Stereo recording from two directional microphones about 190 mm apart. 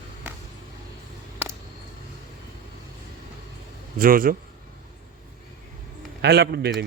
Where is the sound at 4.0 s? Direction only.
50° right (ahead or behind).